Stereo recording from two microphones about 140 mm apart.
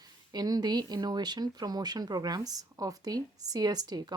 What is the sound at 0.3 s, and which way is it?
Speech, 30° right (ahead or behind).